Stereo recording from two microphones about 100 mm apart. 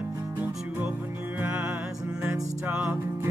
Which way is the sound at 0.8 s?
15° right (ahead or behind).